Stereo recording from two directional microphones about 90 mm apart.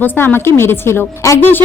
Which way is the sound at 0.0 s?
25° left (ahead or behind).